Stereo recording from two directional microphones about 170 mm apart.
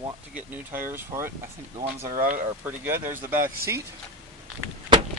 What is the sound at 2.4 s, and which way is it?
Speech, 15° right (ahead or behind).